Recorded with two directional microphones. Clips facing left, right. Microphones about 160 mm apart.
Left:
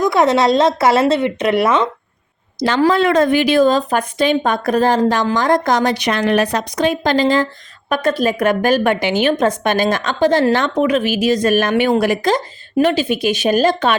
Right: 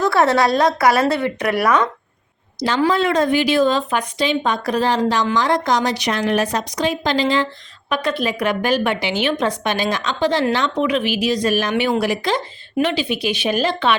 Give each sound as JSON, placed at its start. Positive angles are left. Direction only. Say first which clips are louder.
{"t": 0.0, "sound": "a woman's voice", "louder": "left 2 dB", "side_deg": 20}
{"t": 2.6, "sound": "a woman's voice", "louder": "left 3 dB", "side_deg": 60}